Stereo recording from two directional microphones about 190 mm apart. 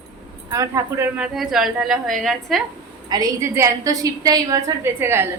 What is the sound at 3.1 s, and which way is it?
A woman's voice, 15° right (ahead or behind).